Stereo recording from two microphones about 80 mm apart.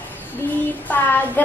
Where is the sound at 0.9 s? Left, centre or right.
Left.